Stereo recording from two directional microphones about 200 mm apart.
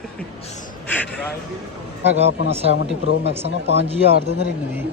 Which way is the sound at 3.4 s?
30° right (ahead or behind).